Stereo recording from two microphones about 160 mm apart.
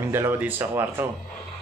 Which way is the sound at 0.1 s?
15° right (ahead or behind).